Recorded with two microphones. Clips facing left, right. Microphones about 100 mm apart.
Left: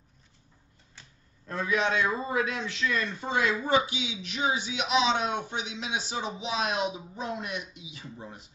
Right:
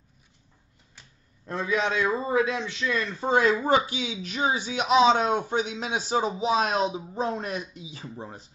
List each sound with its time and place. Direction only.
1.5 s a man's voice: 30° right (ahead or behind)